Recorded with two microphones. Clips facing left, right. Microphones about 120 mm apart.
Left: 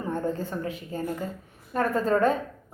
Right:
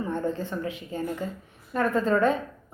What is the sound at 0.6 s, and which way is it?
A woman's voice, 40° left (ahead or behind).